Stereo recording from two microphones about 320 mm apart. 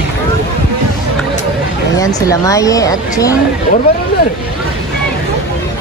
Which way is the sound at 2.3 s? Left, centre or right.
Centre.